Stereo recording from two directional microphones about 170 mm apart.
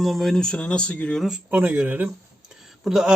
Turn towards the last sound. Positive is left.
turn(degrees=-5)  # may be behind; listen again after turning